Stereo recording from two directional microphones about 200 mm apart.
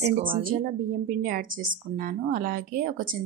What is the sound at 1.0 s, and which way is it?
A woman's voice, 45° right (ahead or behind).